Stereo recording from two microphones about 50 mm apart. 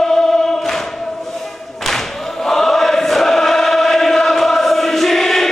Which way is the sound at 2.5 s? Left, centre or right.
Centre.